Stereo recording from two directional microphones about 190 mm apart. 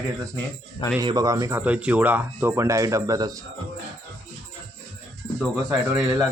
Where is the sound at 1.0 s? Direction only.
20° right (ahead or behind).